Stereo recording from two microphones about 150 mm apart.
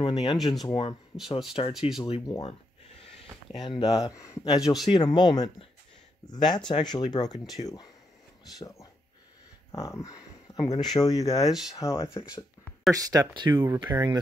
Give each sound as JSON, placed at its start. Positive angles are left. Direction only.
{"t": 0.0, "sound": "speech", "side_deg": 35}
{"t": 1.7, "sound": "speech", "side_deg": 0}
{"t": 2.0, "sound": "speech", "side_deg": 40}
{"t": 3.6, "sound": "speech", "side_deg": 30}
{"t": 4.6, "sound": "speech", "side_deg": -5}
{"t": 4.9, "sound": "speech", "side_deg": 30}
{"t": 11.4, "sound": "speech", "side_deg": 0}
{"t": 11.7, "sound": "speech", "side_deg": 20}
{"t": 12.9, "sound": "speech", "side_deg": -25}